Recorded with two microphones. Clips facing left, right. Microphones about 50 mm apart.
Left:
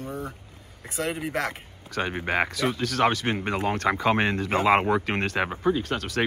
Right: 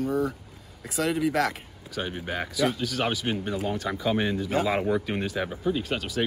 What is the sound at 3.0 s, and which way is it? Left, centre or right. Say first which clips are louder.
Speech: left 6 dB; left.